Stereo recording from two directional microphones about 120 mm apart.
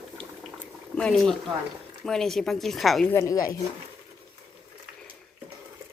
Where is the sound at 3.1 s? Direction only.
30° left (ahead or behind).